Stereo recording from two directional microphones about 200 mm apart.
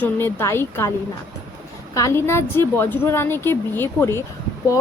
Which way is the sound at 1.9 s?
15° left (ahead or behind).